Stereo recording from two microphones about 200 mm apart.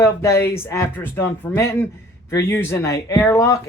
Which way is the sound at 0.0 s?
15° left (ahead or behind).